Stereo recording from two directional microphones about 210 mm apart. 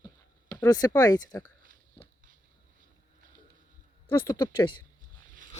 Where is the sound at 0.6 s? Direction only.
20° left (ahead or behind).